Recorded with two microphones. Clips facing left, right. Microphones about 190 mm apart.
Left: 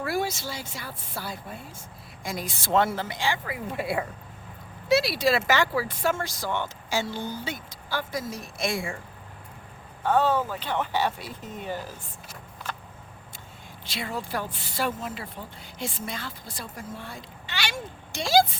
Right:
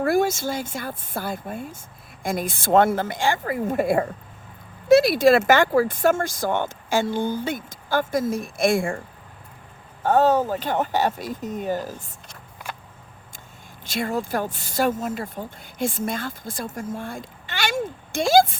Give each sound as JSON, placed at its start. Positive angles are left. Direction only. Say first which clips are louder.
{"t": 0.0, "sound": "speech", "louder": "right 8 dB", "side_deg": -50}
{"t": 10.0, "sound": "speech", "louder": "right 5 dB", "side_deg": -40}
{"t": 13.8, "sound": "speech", "louder": "right 8 dB", "side_deg": -45}